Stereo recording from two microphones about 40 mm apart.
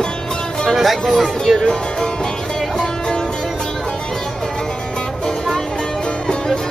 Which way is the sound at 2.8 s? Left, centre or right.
Centre.